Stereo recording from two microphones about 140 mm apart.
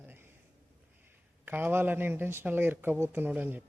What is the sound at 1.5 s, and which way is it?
Speech, 15° right (ahead or behind).